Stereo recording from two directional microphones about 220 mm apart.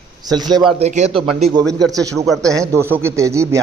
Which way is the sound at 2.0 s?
15° right (ahead or behind).